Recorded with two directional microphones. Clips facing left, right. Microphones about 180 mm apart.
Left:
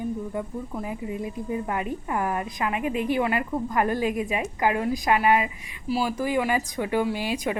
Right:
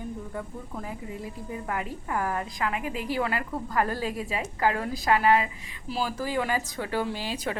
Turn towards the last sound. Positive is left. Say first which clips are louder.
# left 5 dB
turn(degrees=15)  # may be behind; listen again after turning